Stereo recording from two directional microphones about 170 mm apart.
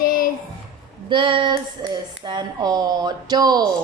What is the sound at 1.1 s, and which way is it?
Speech, 30° right (ahead or behind).